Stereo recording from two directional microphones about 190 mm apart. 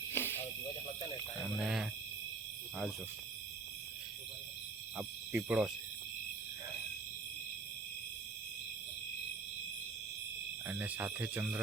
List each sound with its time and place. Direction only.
0.1 s snake: 10° left (ahead or behind)
1.5 s speech: 5° right (ahead or behind)
4.9 s speech: 10° right (ahead or behind)
10.7 s speech: 10° right (ahead or behind)